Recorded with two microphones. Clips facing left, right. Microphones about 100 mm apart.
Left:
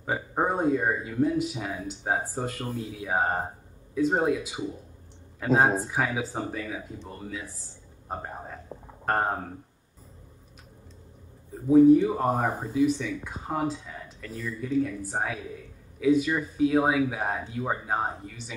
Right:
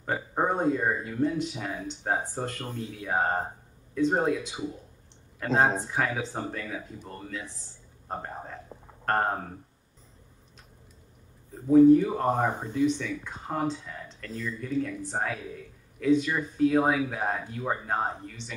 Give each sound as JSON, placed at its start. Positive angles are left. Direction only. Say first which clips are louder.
{"t": 0.0, "sound": "a man's voice", "louder": "left 1 dB", "side_deg": 5}
{"t": 11.6, "sound": "a man's voice", "louder": "even", "side_deg": 10}